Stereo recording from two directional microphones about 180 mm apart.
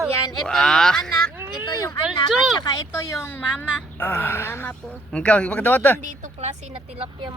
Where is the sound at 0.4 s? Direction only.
5° left (ahead or behind).